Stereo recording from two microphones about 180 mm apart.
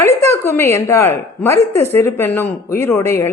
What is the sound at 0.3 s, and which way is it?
A woman's voice, 15° left (ahead or behind).